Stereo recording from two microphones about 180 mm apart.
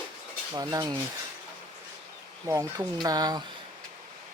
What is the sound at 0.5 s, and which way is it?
Speech, 20° right (ahead or behind).